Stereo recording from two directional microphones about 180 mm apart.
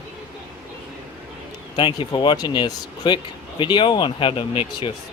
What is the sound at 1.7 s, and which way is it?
Speech, 25° left (ahead or behind).